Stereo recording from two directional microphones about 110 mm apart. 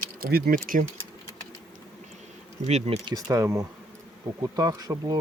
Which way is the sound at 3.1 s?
35° right (ahead or behind).